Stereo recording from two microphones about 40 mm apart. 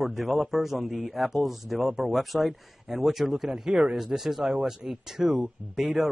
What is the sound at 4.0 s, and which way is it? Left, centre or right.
Speech, centre.